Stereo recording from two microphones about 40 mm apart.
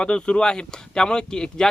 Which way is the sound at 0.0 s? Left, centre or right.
Left.